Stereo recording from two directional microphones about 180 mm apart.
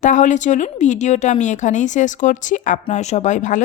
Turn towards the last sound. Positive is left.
turn(degrees=45)  # may be behind; listen again after turning